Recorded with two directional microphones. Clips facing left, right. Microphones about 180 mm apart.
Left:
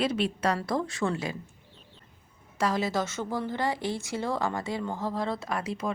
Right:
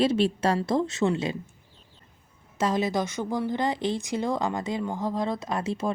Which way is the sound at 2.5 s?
20° right (ahead or behind).